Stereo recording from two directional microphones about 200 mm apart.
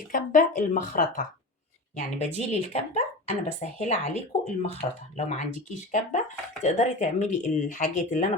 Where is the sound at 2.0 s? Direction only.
35° left (ahead or behind).